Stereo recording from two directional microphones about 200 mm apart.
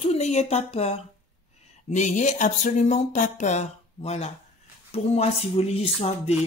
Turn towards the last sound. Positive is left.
turn(degrees=30)  # may be behind; listen again after turning